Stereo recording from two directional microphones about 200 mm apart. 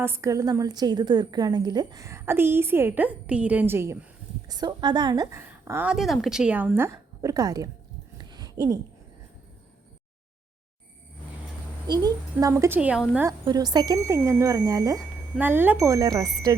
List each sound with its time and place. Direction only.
0.0 s a woman's voice: 15° right (ahead or behind)
8.2 s a sound: 20° right (ahead or behind)
11.9 s a woman's voice: 20° right (ahead or behind)
13.5 s a woman's voice: 20° right (ahead or behind)